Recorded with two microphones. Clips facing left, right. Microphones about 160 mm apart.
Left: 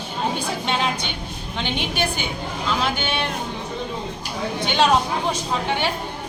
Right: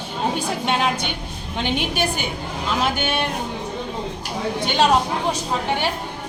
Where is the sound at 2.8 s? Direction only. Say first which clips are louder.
Right 2 dB; 45° right (ahead or behind).